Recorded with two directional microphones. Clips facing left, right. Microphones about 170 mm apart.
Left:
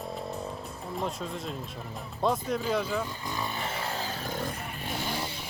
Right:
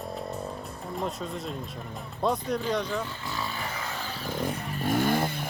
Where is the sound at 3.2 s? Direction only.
20° left (ahead or behind).